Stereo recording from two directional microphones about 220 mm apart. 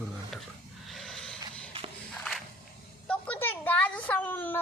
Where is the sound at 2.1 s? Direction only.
Centre (ahead or behind).